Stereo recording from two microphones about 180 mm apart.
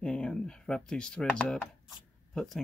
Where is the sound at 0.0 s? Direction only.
5° left (ahead or behind).